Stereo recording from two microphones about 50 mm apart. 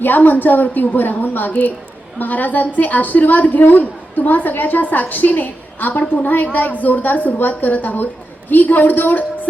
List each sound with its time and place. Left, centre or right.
0.0 s a woman's voice: left